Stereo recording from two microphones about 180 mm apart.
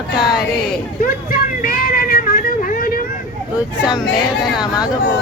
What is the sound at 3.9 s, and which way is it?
Speech, centre (ahead or behind).